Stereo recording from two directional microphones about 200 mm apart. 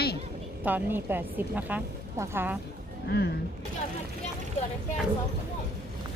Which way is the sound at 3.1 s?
55° left (ahead or behind).